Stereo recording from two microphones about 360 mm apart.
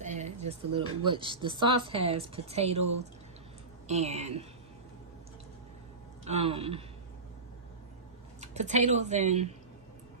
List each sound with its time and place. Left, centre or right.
0.0 s speech: centre
3.8 s speech: centre
6.2 s speech: centre
8.4 s speech: centre